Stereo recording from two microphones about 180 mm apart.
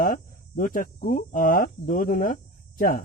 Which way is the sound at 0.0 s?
50° left (ahead or behind).